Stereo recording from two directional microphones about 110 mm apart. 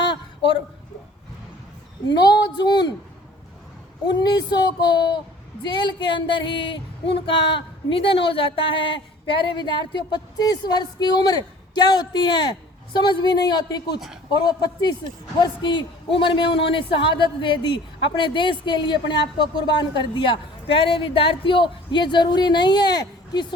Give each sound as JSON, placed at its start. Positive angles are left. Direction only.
{"t": 2.0, "sound": "a woman's voice", "side_deg": 40}
{"t": 4.0, "sound": "a man's voice", "side_deg": 40}